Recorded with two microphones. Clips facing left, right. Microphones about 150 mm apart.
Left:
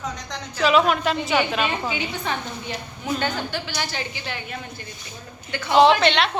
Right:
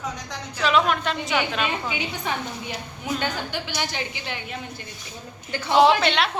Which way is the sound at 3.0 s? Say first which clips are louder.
Left 2 dB; 15° right (ahead or behind).